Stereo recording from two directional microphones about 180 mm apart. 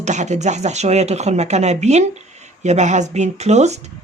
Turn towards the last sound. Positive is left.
turn(degrees=-40)  # may be behind; listen again after turning